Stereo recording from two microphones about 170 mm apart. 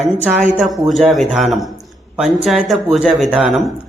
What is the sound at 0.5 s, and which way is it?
A man's voice, centre (ahead or behind).